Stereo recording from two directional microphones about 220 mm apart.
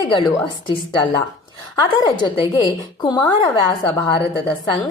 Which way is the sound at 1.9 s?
20° left (ahead or behind).